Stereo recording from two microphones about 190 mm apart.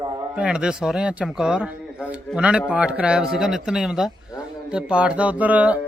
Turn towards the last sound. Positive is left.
turn(degrees=-10)  # may be behind; listen again after turning